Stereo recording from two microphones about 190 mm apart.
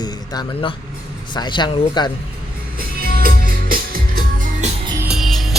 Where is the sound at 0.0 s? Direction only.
20° left (ahead or behind).